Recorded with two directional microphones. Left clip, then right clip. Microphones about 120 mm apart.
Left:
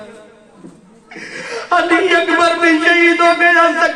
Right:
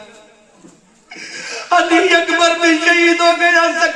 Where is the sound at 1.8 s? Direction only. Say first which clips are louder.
Even; 10° right (ahead or behind).